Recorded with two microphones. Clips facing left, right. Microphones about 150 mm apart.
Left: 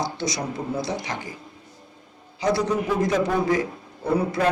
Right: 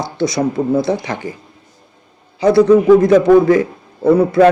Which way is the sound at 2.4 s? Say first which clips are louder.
Right 13 dB; 60° right (ahead or behind).